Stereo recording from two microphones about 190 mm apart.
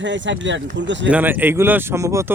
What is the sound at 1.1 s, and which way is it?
Speech, 10° right (ahead or behind).